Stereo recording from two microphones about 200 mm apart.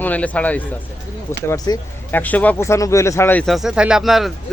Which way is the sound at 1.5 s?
20° left (ahead or behind).